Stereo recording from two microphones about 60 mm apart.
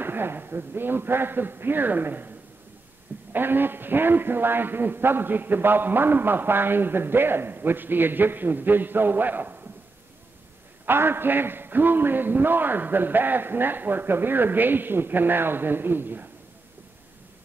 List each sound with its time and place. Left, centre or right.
0.0 s a man's voice: right
3.3 s a man's voice: right
10.9 s a man's voice: right